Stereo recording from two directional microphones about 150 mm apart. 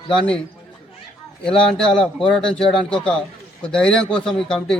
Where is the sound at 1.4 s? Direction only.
5° left (ahead or behind).